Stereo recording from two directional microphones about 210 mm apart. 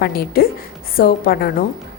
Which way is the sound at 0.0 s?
45° left (ahead or behind).